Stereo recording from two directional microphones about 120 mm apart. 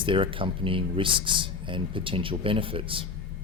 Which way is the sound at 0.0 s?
45° right (ahead or behind).